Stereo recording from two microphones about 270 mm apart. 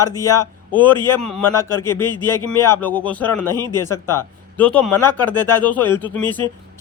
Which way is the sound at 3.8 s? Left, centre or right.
Centre.